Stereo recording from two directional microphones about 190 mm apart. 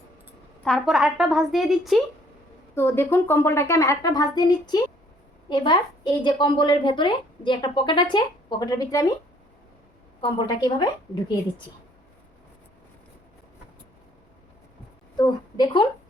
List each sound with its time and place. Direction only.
0.6 s a woman's voice: centre (ahead or behind)
2.7 s a woman's voice: 10° left (ahead or behind)
10.2 s a woman's voice: 25° left (ahead or behind)
15.2 s a woman's voice: 20° left (ahead or behind)